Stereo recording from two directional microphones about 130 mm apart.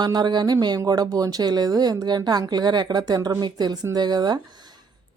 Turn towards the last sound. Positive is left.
turn(degrees=-35)  # may be behind; listen again after turning